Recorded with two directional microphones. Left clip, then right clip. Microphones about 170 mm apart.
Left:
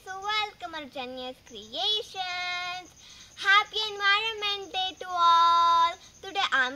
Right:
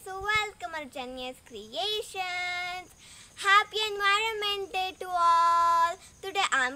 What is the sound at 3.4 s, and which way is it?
Speech, 25° right (ahead or behind).